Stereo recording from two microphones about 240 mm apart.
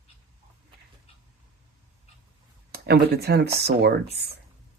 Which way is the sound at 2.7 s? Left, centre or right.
Right.